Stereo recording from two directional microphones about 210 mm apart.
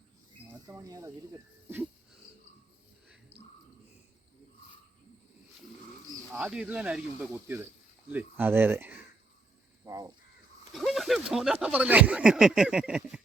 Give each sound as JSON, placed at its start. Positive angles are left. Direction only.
{"t": 0.7, "sound": "speech", "side_deg": -15}
{"t": 6.3, "sound": "speech", "side_deg": -5}
{"t": 9.8, "sound": "caw", "side_deg": -15}
{"t": 10.8, "sound": "speech", "side_deg": 0}